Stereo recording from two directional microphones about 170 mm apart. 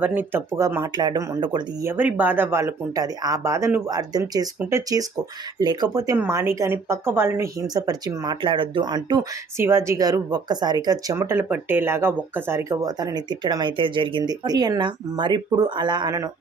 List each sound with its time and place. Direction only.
0.0 s speech: 10° right (ahead or behind)
1.9 s speech: 10° right (ahead or behind)